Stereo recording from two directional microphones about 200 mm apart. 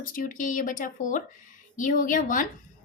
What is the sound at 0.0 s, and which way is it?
Speech, 45° left (ahead or behind).